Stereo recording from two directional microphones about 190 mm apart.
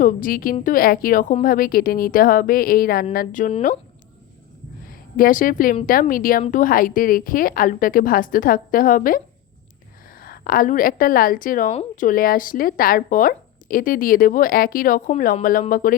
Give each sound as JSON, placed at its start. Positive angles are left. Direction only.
{"t": 0.0, "sound": "a woman's voice", "side_deg": 45}
{"t": 4.9, "sound": "a woman's voice", "side_deg": 50}